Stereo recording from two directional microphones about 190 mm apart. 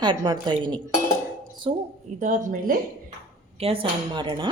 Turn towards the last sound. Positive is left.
turn(degrees=-25)  # may be behind; listen again after turning